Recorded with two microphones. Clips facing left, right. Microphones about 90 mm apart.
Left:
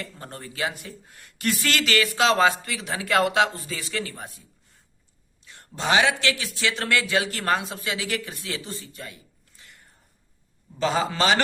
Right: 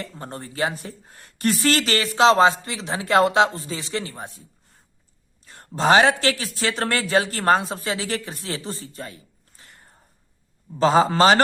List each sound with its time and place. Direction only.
0.0 s speech: 30° right (ahead or behind)
5.5 s a man's voice: 40° right (ahead or behind)